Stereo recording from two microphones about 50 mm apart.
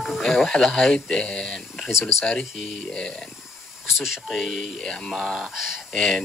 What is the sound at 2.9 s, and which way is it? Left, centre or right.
Speech, centre.